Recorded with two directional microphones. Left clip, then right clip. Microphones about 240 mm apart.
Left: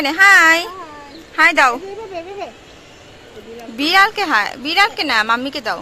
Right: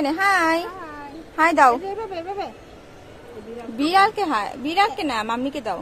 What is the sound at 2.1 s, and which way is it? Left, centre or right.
Speech, right.